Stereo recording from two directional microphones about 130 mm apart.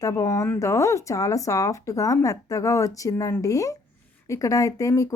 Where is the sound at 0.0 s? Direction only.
25° left (ahead or behind).